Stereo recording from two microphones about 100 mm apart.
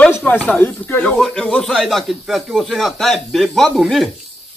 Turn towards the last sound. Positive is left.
turn(degrees=0)  # may be behind; listen again after turning